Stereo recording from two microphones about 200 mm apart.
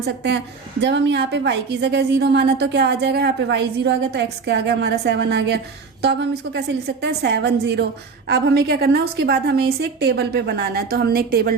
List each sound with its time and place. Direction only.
0.0 s a woman's voice: 60° right (ahead or behind)